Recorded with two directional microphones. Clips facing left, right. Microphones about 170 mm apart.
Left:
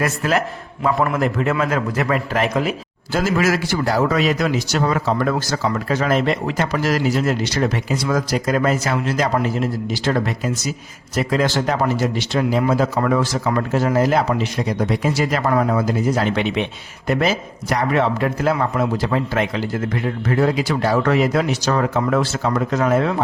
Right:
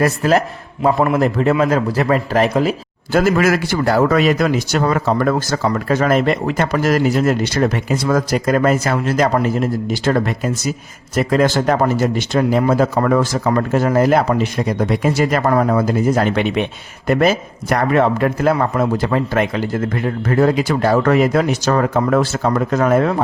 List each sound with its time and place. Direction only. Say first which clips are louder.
0.0 s a man's voice: right 5 dB; 35° right (ahead or behind)
3.1 s a man's voice: right 4 dB; 55° right (ahead or behind)